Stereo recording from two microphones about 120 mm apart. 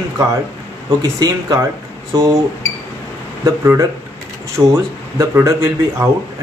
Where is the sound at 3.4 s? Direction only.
30° right (ahead or behind).